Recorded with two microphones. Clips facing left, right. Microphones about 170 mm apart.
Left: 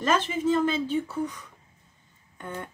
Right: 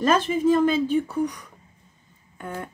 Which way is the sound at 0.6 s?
15° right (ahead or behind).